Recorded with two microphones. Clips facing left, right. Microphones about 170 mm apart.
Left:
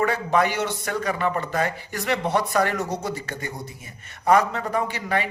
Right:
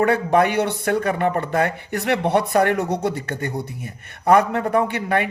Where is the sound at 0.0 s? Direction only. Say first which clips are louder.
Right 4 dB; 55° right (ahead or behind).